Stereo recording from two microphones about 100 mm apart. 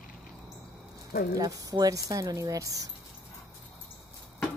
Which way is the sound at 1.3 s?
35° right (ahead or behind).